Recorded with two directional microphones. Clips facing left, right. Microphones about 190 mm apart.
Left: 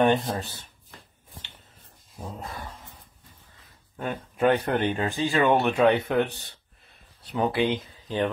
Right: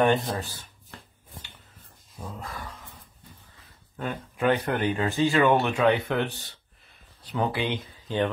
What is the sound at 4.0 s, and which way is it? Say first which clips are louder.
Speech: left 3 dB; 20° left (ahead or behind).